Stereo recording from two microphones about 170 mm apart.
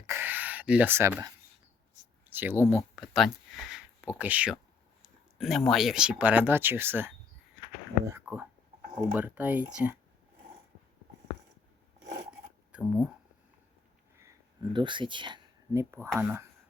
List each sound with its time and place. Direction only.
0.1 s a sound: 10° right (ahead or behind)
2.3 s speech: 10° right (ahead or behind)
2.9 s speech: centre (ahead or behind)
8.2 s speech: 10° right (ahead or behind)
12.7 s speech: 5° right (ahead or behind)
14.2 s speech: 20° right (ahead or behind)
15.7 s speech: 15° right (ahead or behind)